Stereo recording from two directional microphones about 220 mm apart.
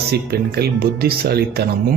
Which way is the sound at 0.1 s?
45° right (ahead or behind).